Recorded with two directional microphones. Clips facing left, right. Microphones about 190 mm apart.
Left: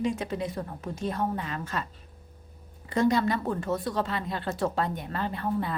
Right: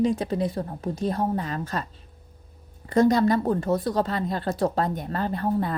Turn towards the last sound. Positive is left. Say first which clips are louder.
# right 4 dB
turn(degrees=-40)  # may be behind; listen again after turning